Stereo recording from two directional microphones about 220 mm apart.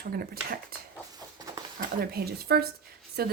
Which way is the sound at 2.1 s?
45° right (ahead or behind).